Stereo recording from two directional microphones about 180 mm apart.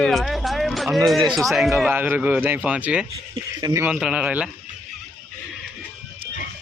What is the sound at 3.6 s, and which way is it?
Speech, 20° right (ahead or behind).